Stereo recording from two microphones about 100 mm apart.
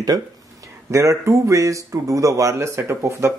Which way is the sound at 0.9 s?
30° right (ahead or behind).